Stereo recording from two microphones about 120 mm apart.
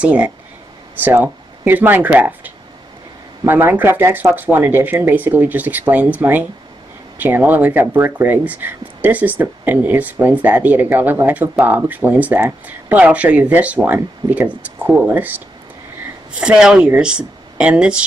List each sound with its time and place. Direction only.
0.0 s speech: 10° right (ahead or behind)